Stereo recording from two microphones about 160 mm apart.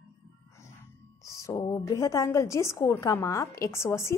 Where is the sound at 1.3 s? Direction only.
20° left (ahead or behind).